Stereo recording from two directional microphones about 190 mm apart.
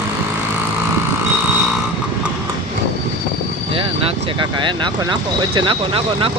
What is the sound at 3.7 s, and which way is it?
Speech, 30° right (ahead or behind).